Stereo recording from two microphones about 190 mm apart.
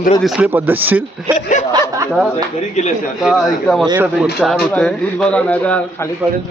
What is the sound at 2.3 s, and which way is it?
Speech, 35° left (ahead or behind).